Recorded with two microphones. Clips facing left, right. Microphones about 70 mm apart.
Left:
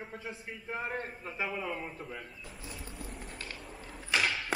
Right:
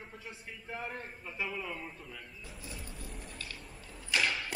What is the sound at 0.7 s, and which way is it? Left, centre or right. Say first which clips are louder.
A man's voice: left 5 dB; left.